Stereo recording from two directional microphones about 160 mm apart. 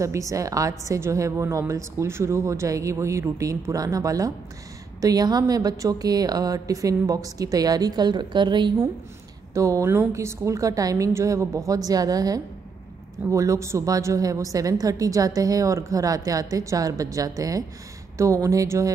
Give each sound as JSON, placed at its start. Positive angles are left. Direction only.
{"t": 0.0, "sound": "a woman's voice", "side_deg": -20}